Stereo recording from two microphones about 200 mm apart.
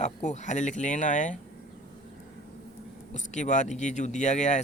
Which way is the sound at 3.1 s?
35° left (ahead or behind).